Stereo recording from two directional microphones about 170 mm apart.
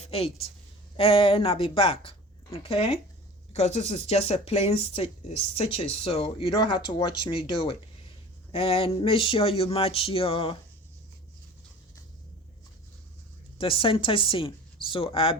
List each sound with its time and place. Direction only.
0.0 s a woman's voice: 35° left (ahead or behind)
13.6 s speech: 30° left (ahead or behind)